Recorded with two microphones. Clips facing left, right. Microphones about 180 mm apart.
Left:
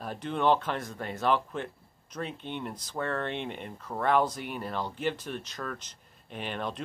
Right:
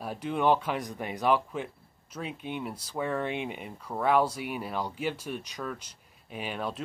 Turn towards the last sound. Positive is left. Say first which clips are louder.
# right 1 dB
turn(degrees=-5)  # may be behind; listen again after turning